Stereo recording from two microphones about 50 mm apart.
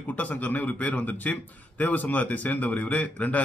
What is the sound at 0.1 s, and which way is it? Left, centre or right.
A man's voice, left.